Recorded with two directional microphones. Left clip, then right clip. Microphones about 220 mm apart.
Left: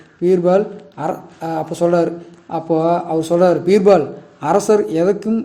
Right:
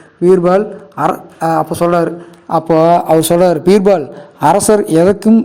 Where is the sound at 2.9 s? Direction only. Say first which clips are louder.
Right 7 dB; 45° right (ahead or behind).